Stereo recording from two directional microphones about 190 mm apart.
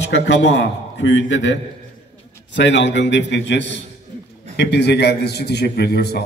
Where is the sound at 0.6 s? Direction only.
70° left (ahead or behind).